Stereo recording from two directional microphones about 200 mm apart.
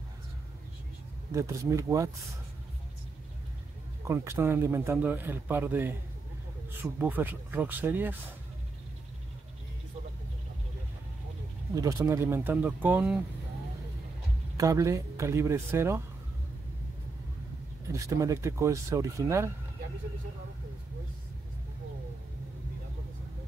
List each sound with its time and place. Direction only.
1.3 s speech: 15° right (ahead or behind)
4.1 s speech: 15° right (ahead or behind)
11.7 s speech: 15° right (ahead or behind)
14.6 s speech: 15° right (ahead or behind)
17.9 s speech: 15° right (ahead or behind)